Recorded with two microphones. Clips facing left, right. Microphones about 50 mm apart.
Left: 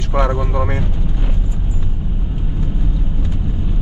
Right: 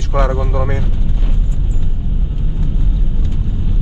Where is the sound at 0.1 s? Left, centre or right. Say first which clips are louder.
Right 1 dB; centre.